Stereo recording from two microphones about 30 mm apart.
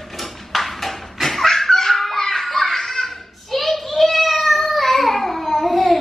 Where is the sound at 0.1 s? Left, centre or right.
Centre.